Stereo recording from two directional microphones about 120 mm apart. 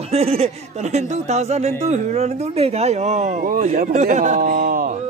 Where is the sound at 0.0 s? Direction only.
60° right (ahead or behind).